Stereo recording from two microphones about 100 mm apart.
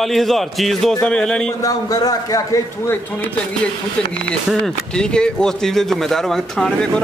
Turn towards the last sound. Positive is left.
turn(degrees=5)  # may be behind; listen again after turning